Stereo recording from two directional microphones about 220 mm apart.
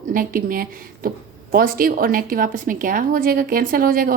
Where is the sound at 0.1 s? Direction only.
40° right (ahead or behind).